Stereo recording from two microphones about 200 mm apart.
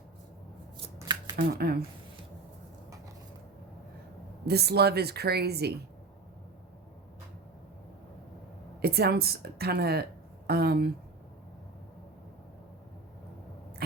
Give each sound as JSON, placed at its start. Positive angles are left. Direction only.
{"t": 0.9, "sound": "shuffling cards", "side_deg": -20}
{"t": 1.4, "sound": "speech", "side_deg": -50}
{"t": 4.4, "sound": "speech", "side_deg": -55}
{"t": 8.8, "sound": "a woman's voice", "side_deg": -50}